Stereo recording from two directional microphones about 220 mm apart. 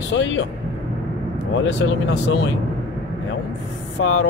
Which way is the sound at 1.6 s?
55° left (ahead or behind).